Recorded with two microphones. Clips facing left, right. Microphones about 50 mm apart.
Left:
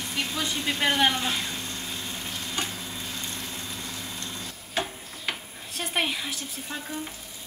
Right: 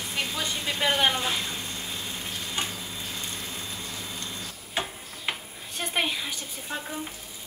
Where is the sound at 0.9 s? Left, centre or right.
Centre.